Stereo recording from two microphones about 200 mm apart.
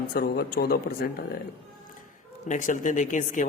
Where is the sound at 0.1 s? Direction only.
50° left (ahead or behind).